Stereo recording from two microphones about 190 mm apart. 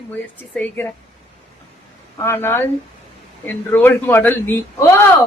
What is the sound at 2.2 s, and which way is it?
A woman's voice, 10° left (ahead or behind).